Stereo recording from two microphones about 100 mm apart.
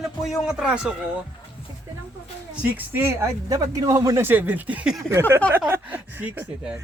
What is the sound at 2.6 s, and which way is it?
Speech, 20° right (ahead or behind).